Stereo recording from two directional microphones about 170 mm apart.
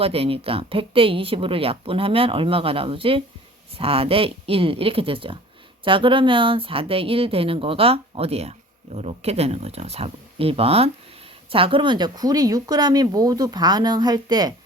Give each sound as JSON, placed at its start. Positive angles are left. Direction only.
{"t": 0.0, "sound": "speech", "side_deg": -35}